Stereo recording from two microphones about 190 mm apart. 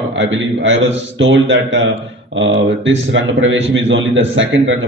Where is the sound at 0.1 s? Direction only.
80° right.